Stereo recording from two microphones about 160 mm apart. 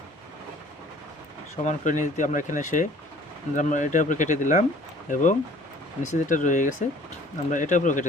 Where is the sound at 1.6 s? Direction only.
50° left (ahead or behind).